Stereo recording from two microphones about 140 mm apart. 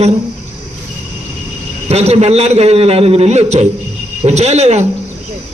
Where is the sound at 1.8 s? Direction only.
50° right (ahead or behind).